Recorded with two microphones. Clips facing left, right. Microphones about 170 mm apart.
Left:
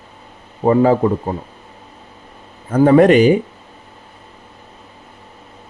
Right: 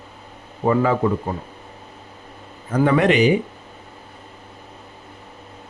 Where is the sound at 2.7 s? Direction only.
40° left (ahead or behind).